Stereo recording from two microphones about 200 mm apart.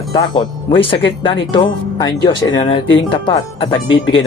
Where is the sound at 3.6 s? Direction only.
25° left (ahead or behind).